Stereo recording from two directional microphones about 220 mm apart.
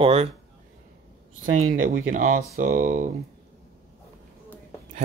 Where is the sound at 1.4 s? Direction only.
35° right (ahead or behind).